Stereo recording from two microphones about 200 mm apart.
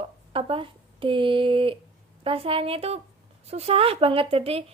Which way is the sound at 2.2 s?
25° right (ahead or behind).